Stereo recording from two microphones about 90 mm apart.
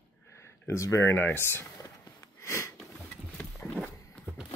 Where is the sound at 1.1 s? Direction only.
25° left (ahead or behind).